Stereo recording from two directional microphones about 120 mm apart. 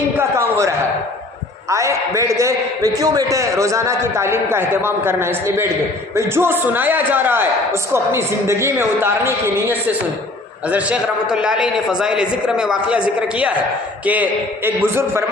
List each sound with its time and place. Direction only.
0.2 s a sound: 20° right (ahead or behind)
1.7 s a man's voice: 25° right (ahead or behind); by 13.0 s 5° right (ahead or behind)
14.0 s a man's voice: 15° right (ahead or behind)